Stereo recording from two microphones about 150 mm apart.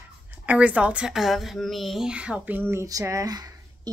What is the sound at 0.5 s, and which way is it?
Speech, 10° right (ahead or behind).